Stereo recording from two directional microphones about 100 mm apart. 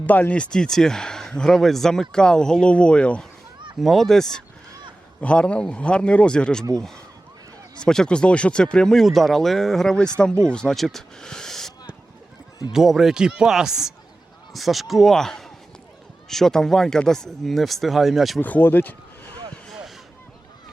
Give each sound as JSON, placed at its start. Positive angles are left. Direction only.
{"t": 0.0, "sound": "speech", "side_deg": 15}
{"t": 3.8, "sound": "speech", "side_deg": 0}
{"t": 12.7, "sound": "speech", "side_deg": -5}
{"t": 18.3, "sound": "speech", "side_deg": 15}